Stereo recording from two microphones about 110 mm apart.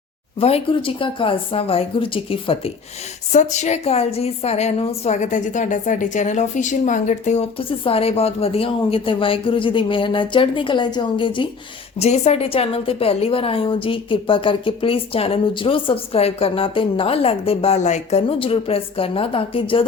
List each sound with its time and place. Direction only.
0.3 s a woman's voice: 65° left (ahead or behind)
3.3 s a woman's voice: 90° left
7.7 s speech: 60° left (ahead or behind)
11.9 s a woman's voice: 85° left; by 19.9 s 55° left (ahead or behind)